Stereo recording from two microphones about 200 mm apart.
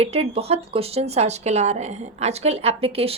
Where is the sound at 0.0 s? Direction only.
30° right (ahead or behind).